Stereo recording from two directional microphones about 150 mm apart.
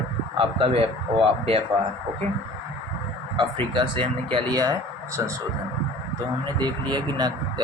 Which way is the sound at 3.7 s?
35° right (ahead or behind).